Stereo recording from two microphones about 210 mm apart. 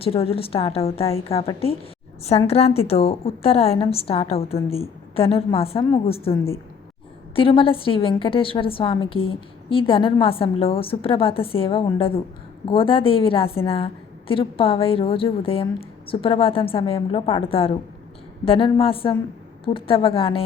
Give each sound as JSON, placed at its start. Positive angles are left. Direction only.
{"t": 0.0, "sound": "a woman's voice", "side_deg": 25}
{"t": 7.3, "sound": "a woman's voice", "side_deg": 25}